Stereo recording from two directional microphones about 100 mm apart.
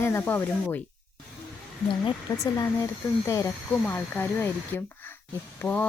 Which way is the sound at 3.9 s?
20° left (ahead or behind).